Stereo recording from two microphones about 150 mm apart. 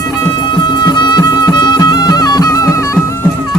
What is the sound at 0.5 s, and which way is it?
Music, 30° left (ahead or behind).